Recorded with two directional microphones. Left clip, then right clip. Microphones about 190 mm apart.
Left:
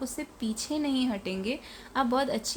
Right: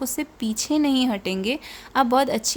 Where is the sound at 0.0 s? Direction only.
35° right (ahead or behind).